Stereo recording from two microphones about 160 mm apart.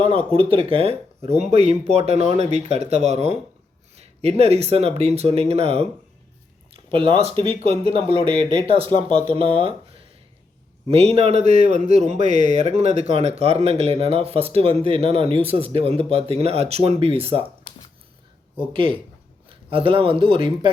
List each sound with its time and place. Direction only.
0.3 s a man's voice: 35° right (ahead or behind)
6.9 s a man's voice: 35° right (ahead or behind)
17.6 s a sound: 25° left (ahead or behind)
18.7 s a man's voice: 35° right (ahead or behind)